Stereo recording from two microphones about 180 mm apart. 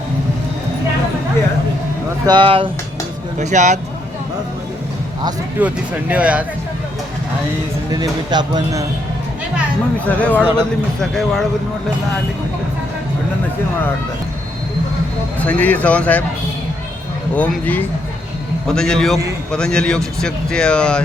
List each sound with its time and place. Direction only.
2.2 s speech: 25° right (ahead or behind)
3.3 s speech: 40° right (ahead or behind)
5.5 s speech: 10° right (ahead or behind)
7.9 s speech: 20° right (ahead or behind)
10.2 s speech: 10° left (ahead or behind)
15.4 s speech: 10° left (ahead or behind)
17.3 s speech: 10° left (ahead or behind)